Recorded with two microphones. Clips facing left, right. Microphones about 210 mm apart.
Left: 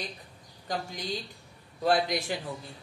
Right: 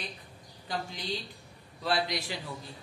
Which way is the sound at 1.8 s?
50° left (ahead or behind).